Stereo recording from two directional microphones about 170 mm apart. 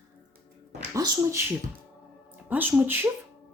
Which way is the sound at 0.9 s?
20° right (ahead or behind).